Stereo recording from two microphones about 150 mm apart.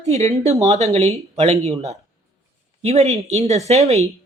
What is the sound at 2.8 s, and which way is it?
Speech, 45° right (ahead or behind).